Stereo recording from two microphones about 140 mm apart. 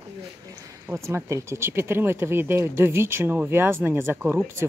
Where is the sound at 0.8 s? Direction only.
20° right (ahead or behind).